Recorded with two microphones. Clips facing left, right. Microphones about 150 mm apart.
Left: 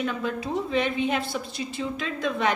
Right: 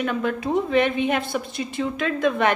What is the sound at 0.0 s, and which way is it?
A woman's voice, 60° right (ahead or behind).